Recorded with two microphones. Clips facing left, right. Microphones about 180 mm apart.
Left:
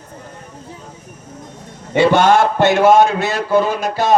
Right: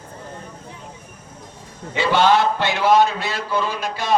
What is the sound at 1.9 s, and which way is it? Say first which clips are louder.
A man's voice: left 5 dB; 55° left (ahead or behind).